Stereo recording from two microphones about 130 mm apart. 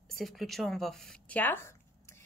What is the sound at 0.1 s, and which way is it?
A woman's voice, centre (ahead or behind).